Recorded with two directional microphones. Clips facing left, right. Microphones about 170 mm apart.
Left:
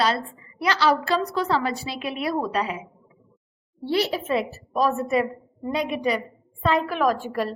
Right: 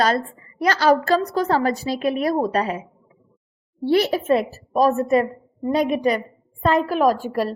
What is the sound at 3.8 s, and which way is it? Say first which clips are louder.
A woman's voice: right 6 dB; 50° right (ahead or behind).